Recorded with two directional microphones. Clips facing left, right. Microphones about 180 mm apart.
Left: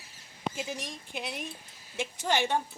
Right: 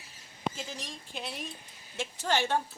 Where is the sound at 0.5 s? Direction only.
10° left (ahead or behind).